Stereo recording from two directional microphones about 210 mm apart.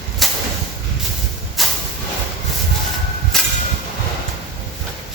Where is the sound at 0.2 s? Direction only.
Centre (ahead or behind).